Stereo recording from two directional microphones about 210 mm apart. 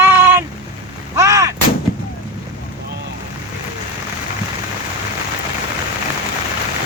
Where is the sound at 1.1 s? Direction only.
15° right (ahead or behind).